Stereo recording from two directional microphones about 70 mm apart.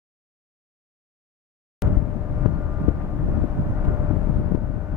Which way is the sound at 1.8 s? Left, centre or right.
Centre.